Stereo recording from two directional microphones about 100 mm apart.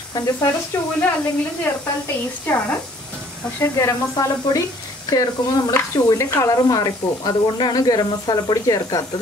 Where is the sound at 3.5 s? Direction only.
30° left (ahead or behind).